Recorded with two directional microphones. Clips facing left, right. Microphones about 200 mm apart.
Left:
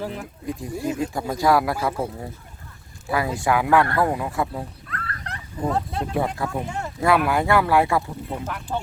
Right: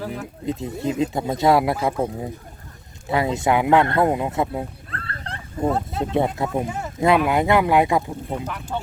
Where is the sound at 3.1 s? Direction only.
25° right (ahead or behind).